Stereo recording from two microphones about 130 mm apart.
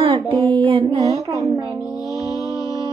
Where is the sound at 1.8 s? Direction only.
5° right (ahead or behind).